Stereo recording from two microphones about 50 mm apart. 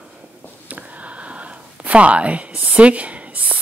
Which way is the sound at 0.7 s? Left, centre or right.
Right.